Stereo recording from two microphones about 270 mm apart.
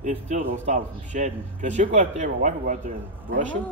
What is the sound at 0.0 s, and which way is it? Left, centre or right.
Speech, right.